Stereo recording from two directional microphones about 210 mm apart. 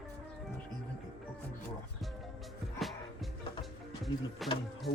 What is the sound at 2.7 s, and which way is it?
Music, centre (ahead or behind).